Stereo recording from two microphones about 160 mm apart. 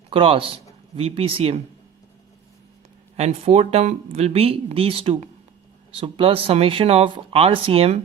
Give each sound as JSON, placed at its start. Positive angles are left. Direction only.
{"t": 0.1, "sound": "speech", "side_deg": -35}
{"t": 3.2, "sound": "speech", "side_deg": -40}